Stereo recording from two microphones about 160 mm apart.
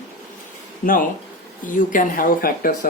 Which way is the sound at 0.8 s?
60° left (ahead or behind).